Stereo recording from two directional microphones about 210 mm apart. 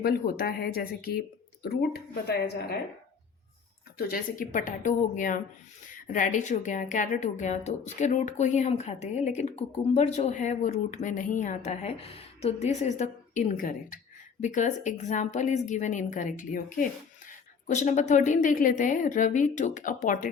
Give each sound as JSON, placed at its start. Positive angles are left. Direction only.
{"t": 0.0, "sound": "speech", "side_deg": 45}
{"t": 3.9, "sound": "a woman's voice", "side_deg": 40}